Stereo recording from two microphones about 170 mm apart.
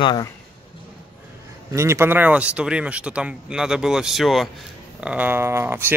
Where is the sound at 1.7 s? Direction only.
15° right (ahead or behind).